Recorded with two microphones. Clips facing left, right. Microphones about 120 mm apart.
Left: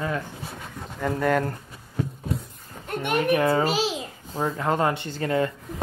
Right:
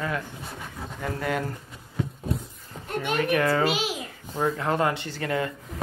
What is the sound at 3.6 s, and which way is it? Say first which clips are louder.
Speech: left 2 dB; 35° left (ahead or behind).